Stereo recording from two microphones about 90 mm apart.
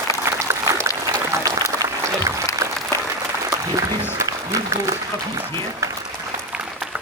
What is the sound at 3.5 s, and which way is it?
Speech, 40° right (ahead or behind).